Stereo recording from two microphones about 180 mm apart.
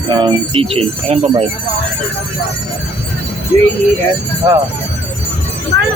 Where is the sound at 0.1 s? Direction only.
25° right (ahead or behind).